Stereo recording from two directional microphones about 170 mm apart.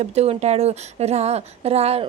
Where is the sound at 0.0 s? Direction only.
40° right (ahead or behind).